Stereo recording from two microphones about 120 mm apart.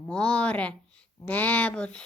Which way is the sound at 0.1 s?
10° left (ahead or behind).